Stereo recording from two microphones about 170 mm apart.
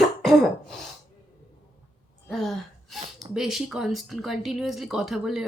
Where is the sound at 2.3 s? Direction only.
Centre (ahead or behind).